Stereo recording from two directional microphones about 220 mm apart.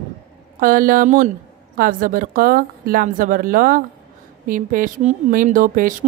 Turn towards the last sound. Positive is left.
turn(degrees=-40)  # may be behind; listen again after turning